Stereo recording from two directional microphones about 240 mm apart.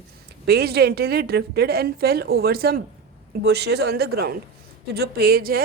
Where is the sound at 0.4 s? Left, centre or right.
Right.